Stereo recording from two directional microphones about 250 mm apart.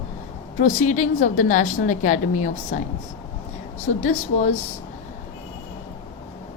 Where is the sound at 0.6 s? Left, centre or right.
Left.